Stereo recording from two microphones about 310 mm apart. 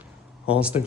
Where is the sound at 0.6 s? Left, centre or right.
Centre.